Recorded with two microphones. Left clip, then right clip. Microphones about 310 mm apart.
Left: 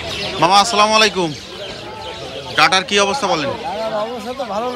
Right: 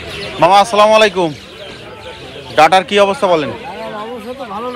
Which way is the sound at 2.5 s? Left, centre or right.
Centre.